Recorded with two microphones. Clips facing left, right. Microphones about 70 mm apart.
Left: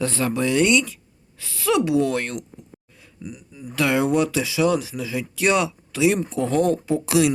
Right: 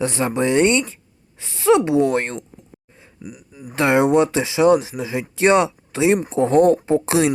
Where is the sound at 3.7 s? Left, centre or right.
Right.